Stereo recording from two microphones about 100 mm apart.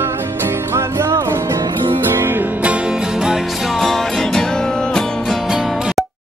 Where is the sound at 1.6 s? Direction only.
55° right (ahead or behind).